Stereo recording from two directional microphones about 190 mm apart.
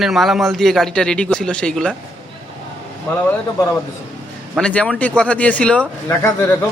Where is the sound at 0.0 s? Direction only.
Centre (ahead or behind).